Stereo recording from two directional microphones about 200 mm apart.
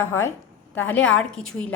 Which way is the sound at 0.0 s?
10° left (ahead or behind).